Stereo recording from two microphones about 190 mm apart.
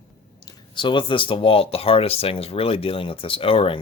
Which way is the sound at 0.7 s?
25° left (ahead or behind).